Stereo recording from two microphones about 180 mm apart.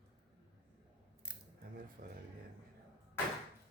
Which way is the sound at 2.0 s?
55° right (ahead or behind).